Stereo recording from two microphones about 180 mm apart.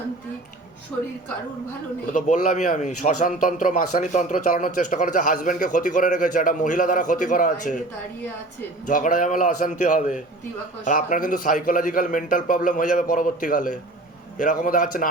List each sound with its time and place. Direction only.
2.1 s a man's voice: 45° left (ahead or behind)
8.9 s a man's voice: 45° left (ahead or behind)